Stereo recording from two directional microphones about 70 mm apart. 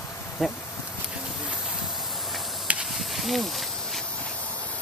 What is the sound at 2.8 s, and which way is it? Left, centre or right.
Snake, centre.